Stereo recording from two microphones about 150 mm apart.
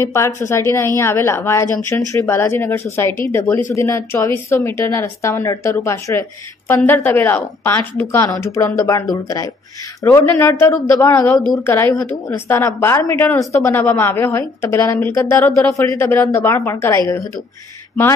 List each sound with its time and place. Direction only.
0.0 s a woman's voice: 20° left (ahead or behind)
10.0 s a woman's voice: 15° left (ahead or behind)